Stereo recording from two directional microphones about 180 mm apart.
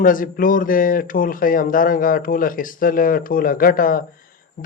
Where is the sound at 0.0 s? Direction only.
50° left (ahead or behind).